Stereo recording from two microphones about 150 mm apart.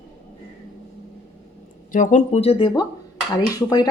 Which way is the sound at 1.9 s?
55° left (ahead or behind).